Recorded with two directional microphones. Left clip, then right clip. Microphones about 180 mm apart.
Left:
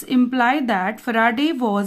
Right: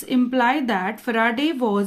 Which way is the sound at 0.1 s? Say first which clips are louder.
Left 1 dB; 30° left (ahead or behind).